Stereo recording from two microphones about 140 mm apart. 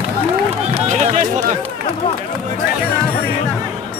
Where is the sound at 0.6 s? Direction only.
55° right (ahead or behind).